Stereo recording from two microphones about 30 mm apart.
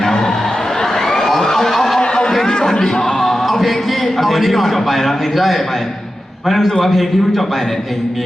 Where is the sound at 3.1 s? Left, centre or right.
Centre.